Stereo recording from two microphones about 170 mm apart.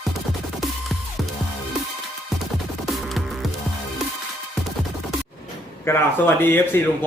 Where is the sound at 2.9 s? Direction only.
Centre (ahead or behind).